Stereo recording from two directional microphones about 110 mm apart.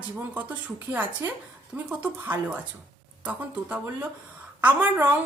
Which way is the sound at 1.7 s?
15° right (ahead or behind).